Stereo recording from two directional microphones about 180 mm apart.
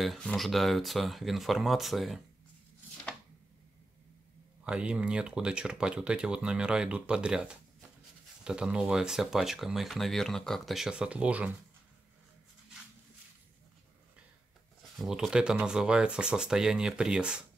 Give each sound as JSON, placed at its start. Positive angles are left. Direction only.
{"t": 0.0, "sound": "speech", "side_deg": 0}
{"t": 4.6, "sound": "speech", "side_deg": -5}
{"t": 14.8, "sound": "speech", "side_deg": 0}